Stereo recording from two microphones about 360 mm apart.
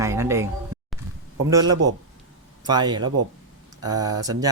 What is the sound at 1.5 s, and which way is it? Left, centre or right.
Speech, centre.